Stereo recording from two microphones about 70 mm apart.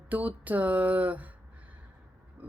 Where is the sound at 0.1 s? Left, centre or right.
Right.